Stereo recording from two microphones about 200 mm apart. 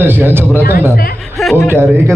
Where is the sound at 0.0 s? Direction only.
10° right (ahead or behind).